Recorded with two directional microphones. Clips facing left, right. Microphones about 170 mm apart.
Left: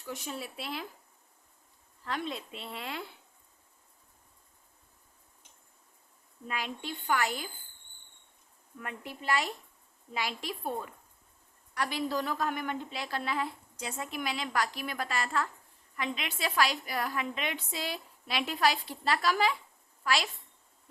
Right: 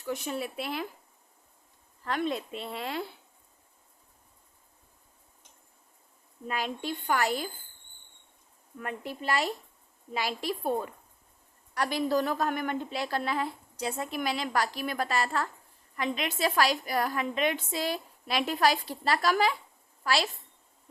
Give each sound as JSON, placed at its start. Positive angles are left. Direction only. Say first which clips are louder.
{"t": 0.0, "sound": "speech", "louder": "right 6 dB", "side_deg": -65}
{"t": 2.0, "sound": "speech", "louder": "right 6 dB", "side_deg": -55}
{"t": 6.5, "sound": "a woman's voice", "louder": "right 4 dB", "side_deg": -40}
{"t": 8.8, "sound": "a woman's voice", "louder": "right 5 dB", "side_deg": -40}